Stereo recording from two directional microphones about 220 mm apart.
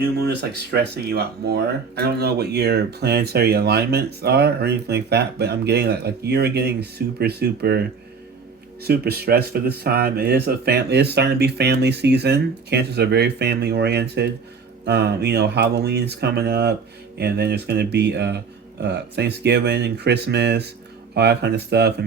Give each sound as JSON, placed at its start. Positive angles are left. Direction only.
{"t": 0.0, "sound": "speech", "side_deg": -45}
{"t": 8.8, "sound": "speech", "side_deg": -45}